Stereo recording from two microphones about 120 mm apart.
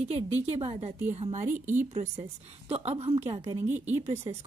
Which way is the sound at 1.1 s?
75° right (ahead or behind).